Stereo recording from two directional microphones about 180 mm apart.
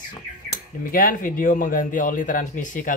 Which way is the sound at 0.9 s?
50° left (ahead or behind).